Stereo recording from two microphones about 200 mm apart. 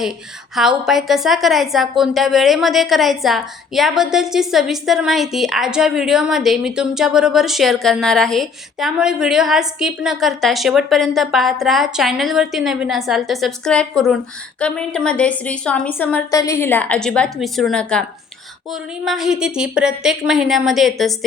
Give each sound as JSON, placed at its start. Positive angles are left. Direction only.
{"t": 0.5, "sound": "a woman's voice", "side_deg": 0}